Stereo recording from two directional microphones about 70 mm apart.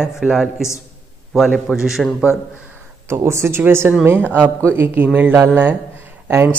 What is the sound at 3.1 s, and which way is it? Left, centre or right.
Speech, right.